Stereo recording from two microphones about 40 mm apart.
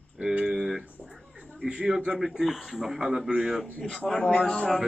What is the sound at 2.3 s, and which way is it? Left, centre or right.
Speech, centre.